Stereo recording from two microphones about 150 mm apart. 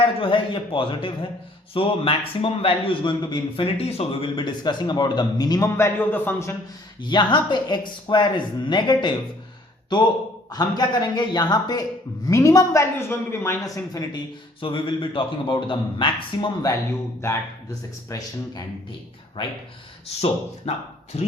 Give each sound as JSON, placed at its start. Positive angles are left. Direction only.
{"t": 0.0, "sound": "a man's voice", "side_deg": 35}
{"t": 7.0, "sound": "a man's voice", "side_deg": 30}
{"t": 10.5, "sound": "a man's voice", "side_deg": 25}
{"t": 17.2, "sound": "a man's voice", "side_deg": 20}
{"t": 20.7, "sound": "speech", "side_deg": 45}